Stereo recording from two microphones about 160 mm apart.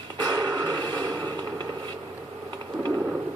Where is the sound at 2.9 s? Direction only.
10° right (ahead or behind).